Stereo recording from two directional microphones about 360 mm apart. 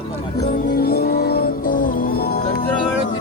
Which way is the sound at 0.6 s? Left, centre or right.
Left.